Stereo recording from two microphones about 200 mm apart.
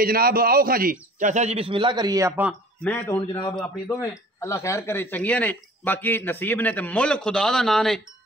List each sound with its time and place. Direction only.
0.0 s a man's voice: 50° right (ahead or behind); by 2.5 s 10° right (ahead or behind)
2.8 s speech: 10° left (ahead or behind)